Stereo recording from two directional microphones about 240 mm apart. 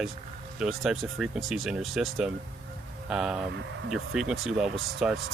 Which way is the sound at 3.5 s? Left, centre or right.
Right.